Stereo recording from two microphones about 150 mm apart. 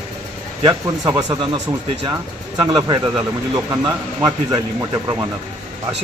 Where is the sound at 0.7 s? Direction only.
25° right (ahead or behind).